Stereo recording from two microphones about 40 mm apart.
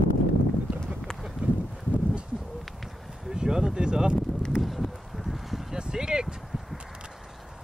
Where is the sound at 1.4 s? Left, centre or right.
Right.